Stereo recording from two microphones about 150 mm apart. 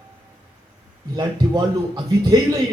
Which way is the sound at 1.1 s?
30° right (ahead or behind).